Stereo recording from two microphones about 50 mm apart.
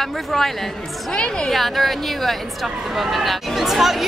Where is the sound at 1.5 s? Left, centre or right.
Centre.